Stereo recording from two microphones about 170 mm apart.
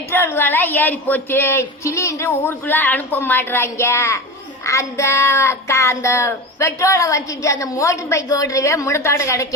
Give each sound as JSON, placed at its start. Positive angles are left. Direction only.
{"t": 0.1, "sound": "child singing", "side_deg": 15}